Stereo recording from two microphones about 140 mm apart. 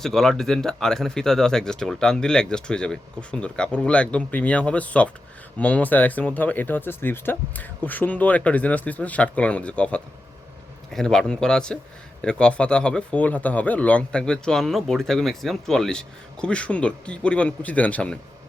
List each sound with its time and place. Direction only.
0.0 s speech: centre (ahead or behind)